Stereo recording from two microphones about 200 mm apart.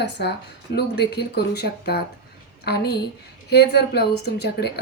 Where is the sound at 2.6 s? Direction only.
55° left (ahead or behind).